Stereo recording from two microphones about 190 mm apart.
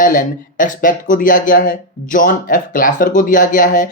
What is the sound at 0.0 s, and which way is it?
Speech, 45° left (ahead or behind).